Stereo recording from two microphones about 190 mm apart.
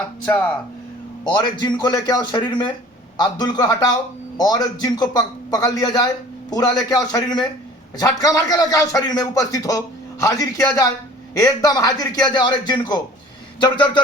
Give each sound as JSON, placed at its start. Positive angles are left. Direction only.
{"t": 1.3, "sound": "a man's voice", "side_deg": 25}